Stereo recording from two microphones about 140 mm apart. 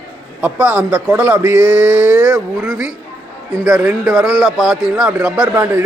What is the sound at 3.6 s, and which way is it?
A man's voice, centre (ahead or behind).